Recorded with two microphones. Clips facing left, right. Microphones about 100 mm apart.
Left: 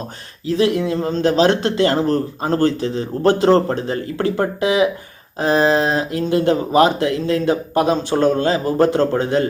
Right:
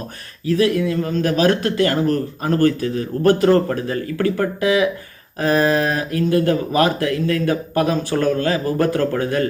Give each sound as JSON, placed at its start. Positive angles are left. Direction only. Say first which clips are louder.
{"t": 0.4, "sound": "speech", "louder": "even", "side_deg": 25}